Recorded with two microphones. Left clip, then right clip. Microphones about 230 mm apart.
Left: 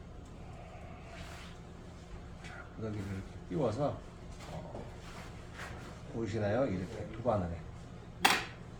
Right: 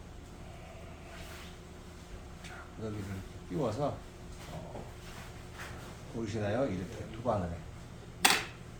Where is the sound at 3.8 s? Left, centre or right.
Centre.